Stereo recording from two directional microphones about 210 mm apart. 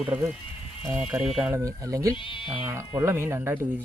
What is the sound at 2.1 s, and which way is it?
Speech, 25° left (ahead or behind).